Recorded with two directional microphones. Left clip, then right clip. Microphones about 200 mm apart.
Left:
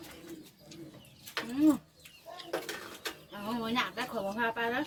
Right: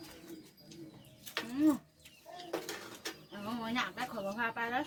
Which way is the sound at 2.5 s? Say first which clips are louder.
Left 3 dB; centre (ahead or behind).